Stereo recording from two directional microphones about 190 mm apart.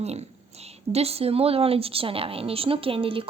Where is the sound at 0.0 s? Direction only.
35° right (ahead or behind).